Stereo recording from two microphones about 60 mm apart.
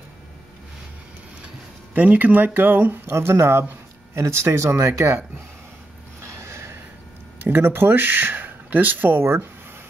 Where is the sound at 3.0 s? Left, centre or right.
Right.